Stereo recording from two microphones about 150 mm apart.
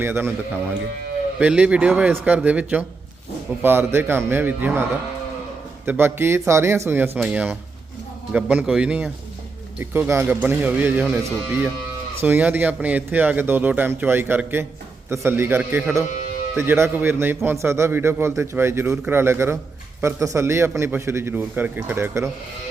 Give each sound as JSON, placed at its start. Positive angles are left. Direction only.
{"t": 0.0, "sound": "a man's voice", "side_deg": -15}
{"t": 1.4, "sound": "a man's voice", "side_deg": -10}